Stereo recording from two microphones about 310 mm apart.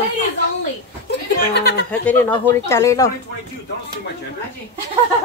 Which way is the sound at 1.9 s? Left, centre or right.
Centre.